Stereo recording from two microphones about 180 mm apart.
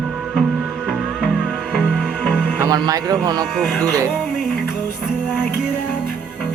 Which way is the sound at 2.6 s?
20° right (ahead or behind).